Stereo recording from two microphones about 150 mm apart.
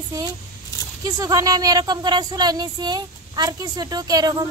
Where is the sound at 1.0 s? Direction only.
25° right (ahead or behind).